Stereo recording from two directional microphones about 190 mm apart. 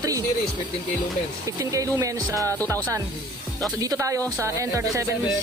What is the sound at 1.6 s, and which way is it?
Speech, 15° right (ahead or behind).